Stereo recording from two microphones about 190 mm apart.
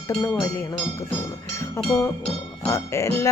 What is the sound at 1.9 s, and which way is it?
Speech, 10° left (ahead or behind).